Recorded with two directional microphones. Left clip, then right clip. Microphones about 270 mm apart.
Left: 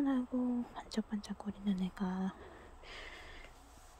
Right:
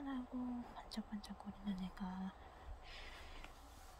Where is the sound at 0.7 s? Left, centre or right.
Centre.